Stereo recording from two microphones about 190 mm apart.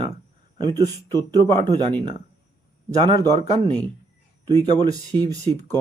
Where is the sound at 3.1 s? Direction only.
20° right (ahead or behind).